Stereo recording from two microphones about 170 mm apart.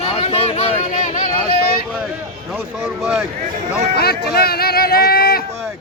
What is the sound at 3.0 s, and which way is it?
Speech, 5° right (ahead or behind).